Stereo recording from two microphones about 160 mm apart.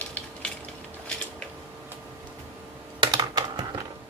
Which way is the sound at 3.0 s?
30° right (ahead or behind).